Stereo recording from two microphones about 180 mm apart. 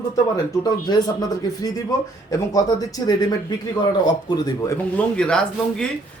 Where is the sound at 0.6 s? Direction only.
20° left (ahead or behind).